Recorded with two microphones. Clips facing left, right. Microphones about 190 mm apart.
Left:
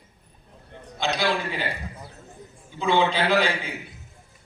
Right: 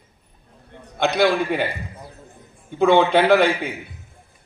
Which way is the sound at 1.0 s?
60° right (ahead or behind).